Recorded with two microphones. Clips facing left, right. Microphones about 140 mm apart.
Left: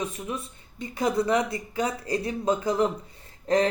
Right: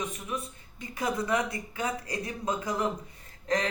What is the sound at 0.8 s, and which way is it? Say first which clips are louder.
Speech: left 6 dB; 30° left (ahead or behind).